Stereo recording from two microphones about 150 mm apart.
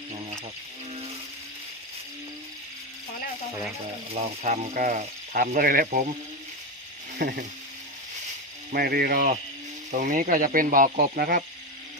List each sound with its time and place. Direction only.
4.1 s speech: 45° right (ahead or behind); by 6.0 s 70° right (ahead or behind)
7.2 s speech: 90° right
8.7 s speech: 90° right
9.9 s speech: 60° right (ahead or behind)